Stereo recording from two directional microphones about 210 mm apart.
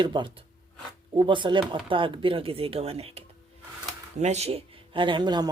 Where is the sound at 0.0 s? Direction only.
20° right (ahead or behind).